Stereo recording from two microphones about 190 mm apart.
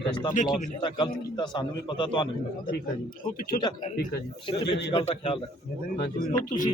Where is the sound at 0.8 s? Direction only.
25° left (ahead or behind).